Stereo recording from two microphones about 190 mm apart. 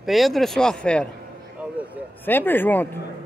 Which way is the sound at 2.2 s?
10° left (ahead or behind).